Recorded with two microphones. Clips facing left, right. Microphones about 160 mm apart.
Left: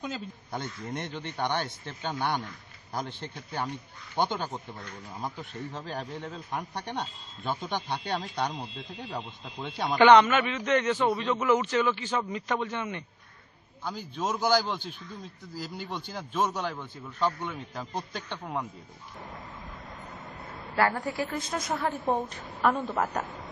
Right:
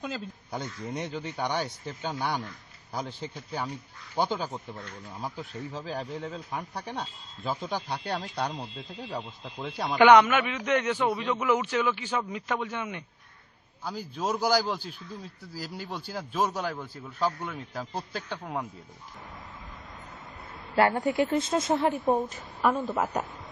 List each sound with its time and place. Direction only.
0.0 s a man's voice: centre (ahead or behind)
20.7 s a woman's voice: 25° right (ahead or behind)
22.1 s speech: 5° right (ahead or behind)